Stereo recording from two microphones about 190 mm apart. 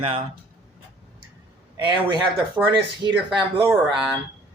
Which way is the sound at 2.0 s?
25° right (ahead or behind).